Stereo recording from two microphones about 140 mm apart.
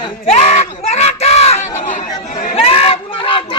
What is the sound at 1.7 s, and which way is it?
Speech, 65° left (ahead or behind).